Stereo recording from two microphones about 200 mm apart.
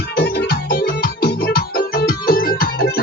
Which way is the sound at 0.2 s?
50° left (ahead or behind).